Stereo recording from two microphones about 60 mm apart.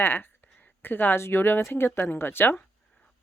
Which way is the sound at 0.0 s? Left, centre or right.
Left.